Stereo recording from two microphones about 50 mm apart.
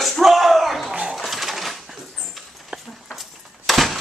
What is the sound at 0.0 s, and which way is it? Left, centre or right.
Slap, centre.